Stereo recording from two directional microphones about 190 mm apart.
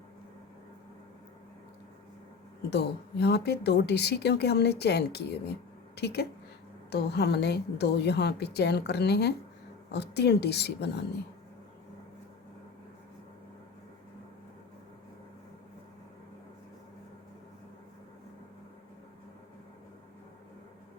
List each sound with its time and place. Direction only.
2.6 s a woman's voice: 60° left (ahead or behind)